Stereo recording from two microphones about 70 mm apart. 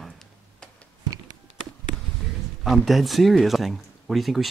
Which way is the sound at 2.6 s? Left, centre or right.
Centre.